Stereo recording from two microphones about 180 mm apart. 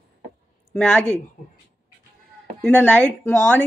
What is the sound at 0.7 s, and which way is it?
Speech, 5° left (ahead or behind).